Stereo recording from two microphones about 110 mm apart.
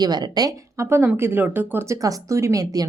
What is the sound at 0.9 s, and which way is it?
Speech, 20° right (ahead or behind).